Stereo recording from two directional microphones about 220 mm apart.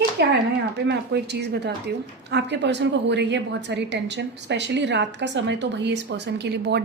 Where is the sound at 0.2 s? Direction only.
50° right (ahead or behind).